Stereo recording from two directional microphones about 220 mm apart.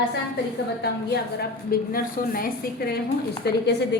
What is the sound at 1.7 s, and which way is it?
Speech, 40° left (ahead or behind).